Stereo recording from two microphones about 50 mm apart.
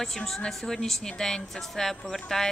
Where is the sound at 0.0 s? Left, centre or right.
Centre.